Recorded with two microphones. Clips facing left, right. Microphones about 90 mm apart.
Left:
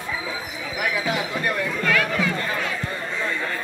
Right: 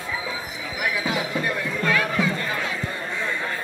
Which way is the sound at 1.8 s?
20° right (ahead or behind).